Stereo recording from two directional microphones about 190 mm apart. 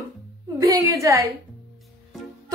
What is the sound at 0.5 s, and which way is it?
Speech, 15° right (ahead or behind).